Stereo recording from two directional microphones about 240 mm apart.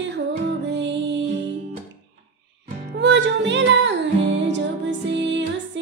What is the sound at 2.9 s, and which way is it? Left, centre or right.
Music, right.